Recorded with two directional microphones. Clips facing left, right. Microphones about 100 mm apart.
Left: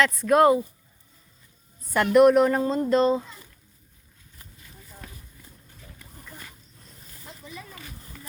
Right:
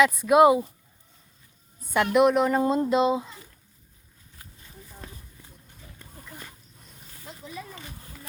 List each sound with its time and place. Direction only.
0.0 s speech: 5° right (ahead or behind)
1.9 s a woman's voice: centre (ahead or behind)
2.6 s speech: 15° right (ahead or behind)
5.0 s walk: 25° right (ahead or behind)